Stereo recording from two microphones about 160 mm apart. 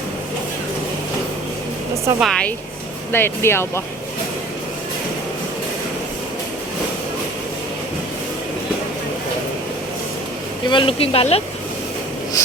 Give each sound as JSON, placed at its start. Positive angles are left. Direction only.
{"t": 2.2, "sound": "speech", "side_deg": 5}
{"t": 10.7, "sound": "speech", "side_deg": 30}